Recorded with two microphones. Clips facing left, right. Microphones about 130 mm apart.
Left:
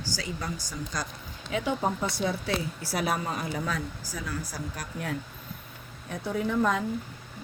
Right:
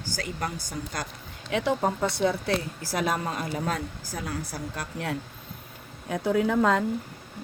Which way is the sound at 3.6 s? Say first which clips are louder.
Right 2 dB; 60° right (ahead or behind).